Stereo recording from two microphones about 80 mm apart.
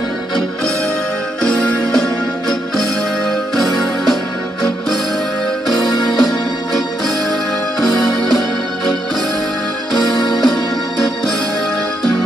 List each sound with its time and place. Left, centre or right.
1.4 s music: centre
5.7 s music: centre
10.1 s music: left